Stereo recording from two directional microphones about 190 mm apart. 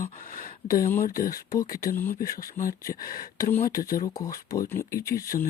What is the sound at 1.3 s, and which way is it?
Speech, 20° left (ahead or behind).